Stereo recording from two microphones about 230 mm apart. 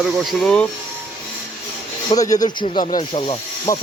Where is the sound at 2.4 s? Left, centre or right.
Left.